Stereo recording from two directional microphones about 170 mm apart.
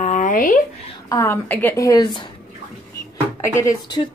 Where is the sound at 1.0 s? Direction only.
15° left (ahead or behind).